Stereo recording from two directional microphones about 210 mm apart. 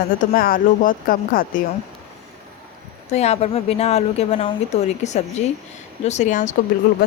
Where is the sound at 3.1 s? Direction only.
30° left (ahead or behind).